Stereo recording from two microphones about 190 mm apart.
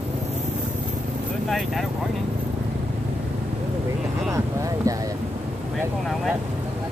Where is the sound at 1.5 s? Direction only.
Centre (ahead or behind).